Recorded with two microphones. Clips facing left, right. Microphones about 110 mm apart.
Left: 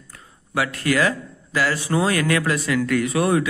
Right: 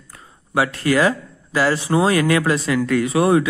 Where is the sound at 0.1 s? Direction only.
25° right (ahead or behind).